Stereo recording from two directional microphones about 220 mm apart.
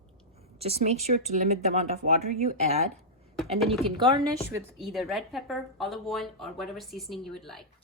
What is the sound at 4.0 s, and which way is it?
Speech, 20° right (ahead or behind).